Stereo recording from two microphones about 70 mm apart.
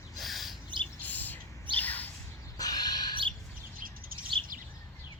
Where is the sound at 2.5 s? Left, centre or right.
Left.